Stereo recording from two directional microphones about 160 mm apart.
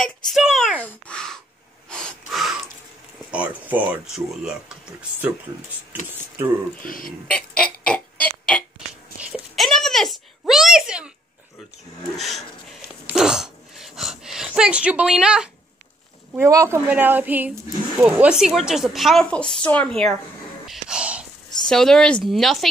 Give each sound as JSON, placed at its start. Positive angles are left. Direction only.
{"t": 0.0, "sound": "a sound", "side_deg": 0}
{"t": 0.7, "sound": "sigh", "side_deg": 10}
{"t": 1.9, "sound": "gasp", "side_deg": 5}
{"t": 3.3, "sound": "a woman's voice", "side_deg": -10}
{"t": 6.9, "sound": "speech", "side_deg": 60}
{"t": 7.2, "sound": "a sound", "side_deg": 5}
{"t": 12.2, "sound": "a sound", "side_deg": 0}
{"t": 16.3, "sound": "a woman's voice", "side_deg": -20}
{"t": 20.6, "sound": "whispering", "side_deg": -5}
{"t": 21.6, "sound": "a woman's voice", "side_deg": 5}